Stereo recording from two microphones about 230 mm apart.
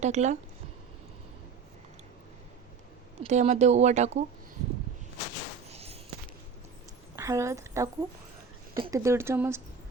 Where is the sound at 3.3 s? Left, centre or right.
Right.